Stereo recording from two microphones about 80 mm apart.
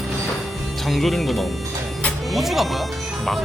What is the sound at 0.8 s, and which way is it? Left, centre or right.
Speech, centre.